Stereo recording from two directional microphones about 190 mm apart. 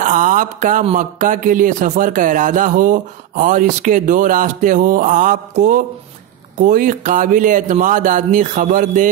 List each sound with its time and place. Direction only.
0.0 s a man's voice: 45° right (ahead or behind)